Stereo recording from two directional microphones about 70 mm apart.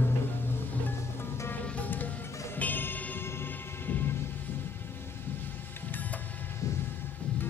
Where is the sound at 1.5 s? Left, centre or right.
Left.